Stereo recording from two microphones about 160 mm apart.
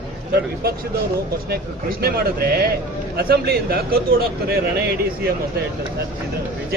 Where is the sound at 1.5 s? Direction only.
75° right (ahead or behind).